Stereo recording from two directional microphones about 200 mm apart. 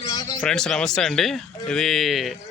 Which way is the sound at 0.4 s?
5° left (ahead or behind).